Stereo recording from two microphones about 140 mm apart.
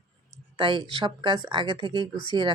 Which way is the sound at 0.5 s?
35° right (ahead or behind).